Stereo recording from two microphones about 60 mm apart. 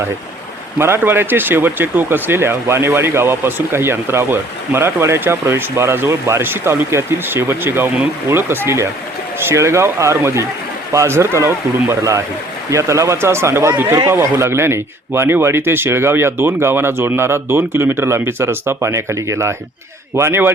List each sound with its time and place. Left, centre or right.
0.8 s speech: right
6.4 s speech: right
20.1 s speech: right